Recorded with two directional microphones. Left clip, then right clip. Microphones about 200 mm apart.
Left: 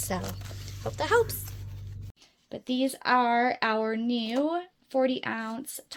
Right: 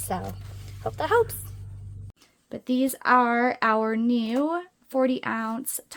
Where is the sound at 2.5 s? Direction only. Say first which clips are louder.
Right 3 dB; 40° right (ahead or behind).